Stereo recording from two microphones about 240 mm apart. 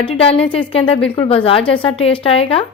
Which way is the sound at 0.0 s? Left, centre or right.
Left.